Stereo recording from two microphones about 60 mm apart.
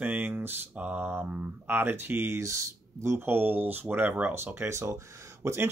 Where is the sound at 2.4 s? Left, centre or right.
Right.